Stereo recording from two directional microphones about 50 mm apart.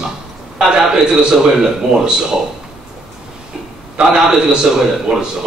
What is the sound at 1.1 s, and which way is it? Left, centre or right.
A man's voice, centre.